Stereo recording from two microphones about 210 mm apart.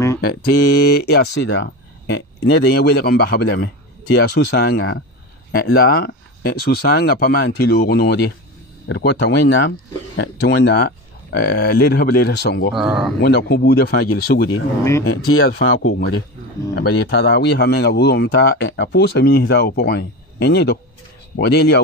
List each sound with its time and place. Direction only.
0.2 s speech: 45° left (ahead or behind)
12.7 s speech: centre (ahead or behind)
13.2 s speech: 50° left (ahead or behind)
15.2 s speech: 85° left
16.7 s speech: 50° left (ahead or behind)